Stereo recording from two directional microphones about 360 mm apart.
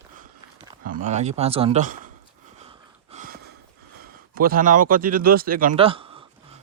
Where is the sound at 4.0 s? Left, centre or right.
Right.